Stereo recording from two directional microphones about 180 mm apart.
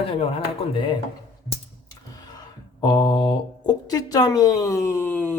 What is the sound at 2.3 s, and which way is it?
Speech, 20° left (ahead or behind).